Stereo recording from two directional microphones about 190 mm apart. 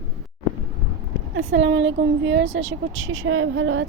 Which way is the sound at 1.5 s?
75° right (ahead or behind).